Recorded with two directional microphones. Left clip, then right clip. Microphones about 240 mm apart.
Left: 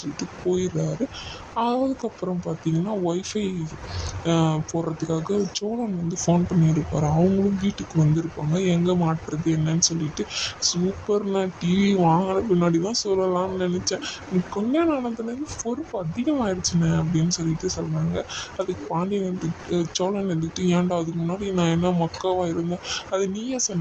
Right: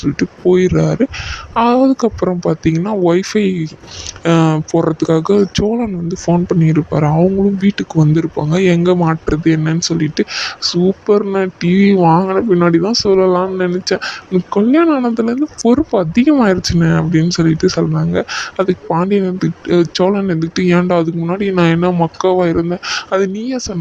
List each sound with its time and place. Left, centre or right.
0.0 s speech: right